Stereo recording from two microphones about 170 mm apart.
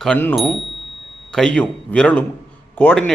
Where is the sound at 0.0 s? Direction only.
10° left (ahead or behind).